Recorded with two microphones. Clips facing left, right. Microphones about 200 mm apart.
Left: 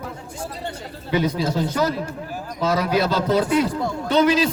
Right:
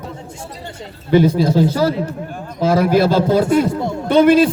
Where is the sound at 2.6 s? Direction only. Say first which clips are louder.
Right 7 dB; 50° right (ahead or behind).